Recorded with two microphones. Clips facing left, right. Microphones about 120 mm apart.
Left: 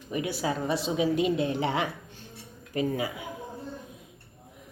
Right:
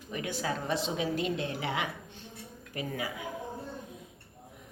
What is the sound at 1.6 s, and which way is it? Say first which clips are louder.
Speech: left 5 dB; 30° left (ahead or behind).